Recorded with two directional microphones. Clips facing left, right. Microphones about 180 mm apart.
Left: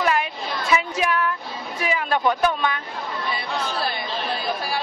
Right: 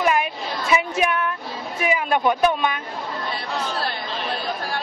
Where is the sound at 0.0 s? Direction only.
10° right (ahead or behind).